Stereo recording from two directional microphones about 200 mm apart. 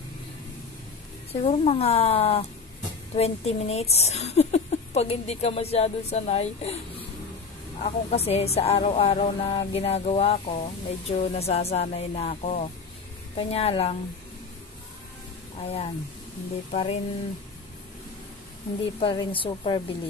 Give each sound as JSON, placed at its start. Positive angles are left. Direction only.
{"t": 1.3, "sound": "speech", "side_deg": 30}
{"t": 7.8, "sound": "speech", "side_deg": 30}
{"t": 15.6, "sound": "speech", "side_deg": 30}
{"t": 18.9, "sound": "speech", "side_deg": 25}